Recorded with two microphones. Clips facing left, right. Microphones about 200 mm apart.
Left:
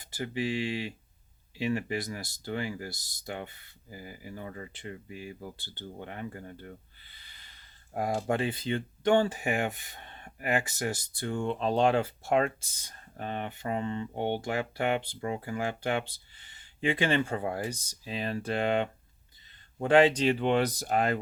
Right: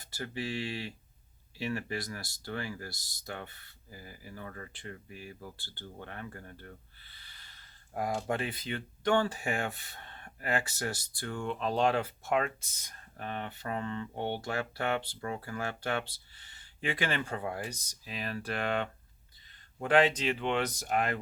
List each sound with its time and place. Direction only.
0.0 s speech: 20° left (ahead or behind)